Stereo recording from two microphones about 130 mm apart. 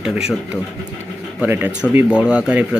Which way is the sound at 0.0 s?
5° right (ahead or behind).